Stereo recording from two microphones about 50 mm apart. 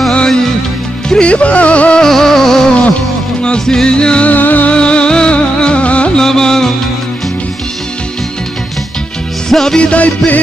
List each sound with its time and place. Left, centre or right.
0.3 s music: centre
1.2 s music: left
2.0 s music: centre
4.3 s music: left
4.7 s music: centre
6.1 s music: centre
9.5 s music: centre
9.8 s music: left